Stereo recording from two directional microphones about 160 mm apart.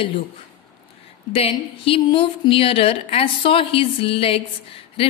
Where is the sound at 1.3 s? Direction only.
35° left (ahead or behind).